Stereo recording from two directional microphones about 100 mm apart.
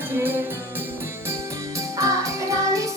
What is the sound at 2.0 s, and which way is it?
Music, 35° right (ahead or behind).